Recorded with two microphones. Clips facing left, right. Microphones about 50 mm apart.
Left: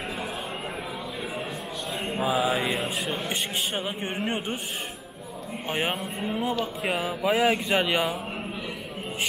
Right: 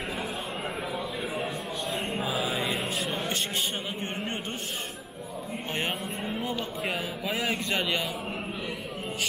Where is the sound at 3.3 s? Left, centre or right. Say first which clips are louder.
Left 1 dB; centre.